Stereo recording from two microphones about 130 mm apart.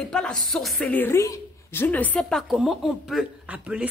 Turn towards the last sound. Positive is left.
turn(degrees=-10)  # may be behind; listen again after turning